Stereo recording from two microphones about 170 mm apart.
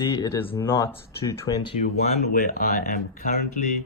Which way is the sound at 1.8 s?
40° left (ahead or behind).